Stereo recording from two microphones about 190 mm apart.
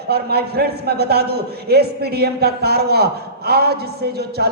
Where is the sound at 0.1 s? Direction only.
55° right (ahead or behind).